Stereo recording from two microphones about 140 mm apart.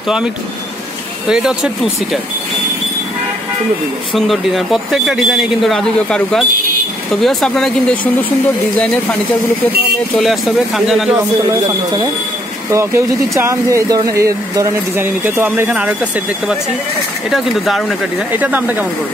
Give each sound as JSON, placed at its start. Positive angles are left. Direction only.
{"t": 1.3, "sound": "speech", "side_deg": -5}
{"t": 4.1, "sound": "speech", "side_deg": 0}
{"t": 10.1, "sound": "speech", "side_deg": 0}
{"t": 11.1, "sound": "speech", "side_deg": -25}
{"t": 18.4, "sound": "speech", "side_deg": -10}